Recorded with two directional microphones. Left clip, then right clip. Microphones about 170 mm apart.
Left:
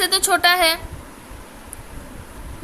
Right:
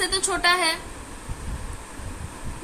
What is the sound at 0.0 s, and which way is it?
Speech, 55° left (ahead or behind).